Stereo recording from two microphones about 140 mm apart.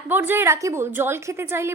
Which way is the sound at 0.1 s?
15° right (ahead or behind).